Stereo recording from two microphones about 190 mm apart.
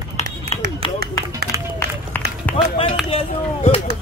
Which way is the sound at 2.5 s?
5° left (ahead or behind).